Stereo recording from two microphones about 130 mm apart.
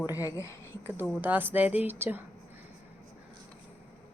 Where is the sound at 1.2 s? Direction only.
15° right (ahead or behind).